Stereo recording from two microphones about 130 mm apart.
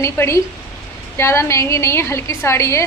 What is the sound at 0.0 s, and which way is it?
A woman's voice, 20° left (ahead or behind).